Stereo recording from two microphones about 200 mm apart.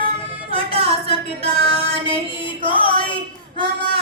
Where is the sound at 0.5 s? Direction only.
30° right (ahead or behind).